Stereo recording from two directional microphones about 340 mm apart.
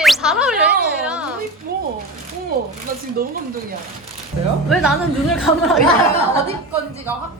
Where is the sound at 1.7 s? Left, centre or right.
Right.